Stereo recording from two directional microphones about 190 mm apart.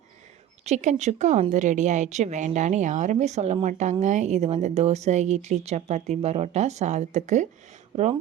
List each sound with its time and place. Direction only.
0.6 s a woman's voice: 35° right (ahead or behind)